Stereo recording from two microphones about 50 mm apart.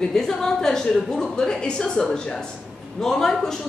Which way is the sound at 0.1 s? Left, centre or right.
Centre.